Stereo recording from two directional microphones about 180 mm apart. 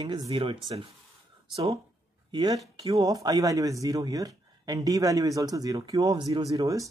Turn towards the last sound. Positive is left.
turn(degrees=-20)  # may be behind; listen again after turning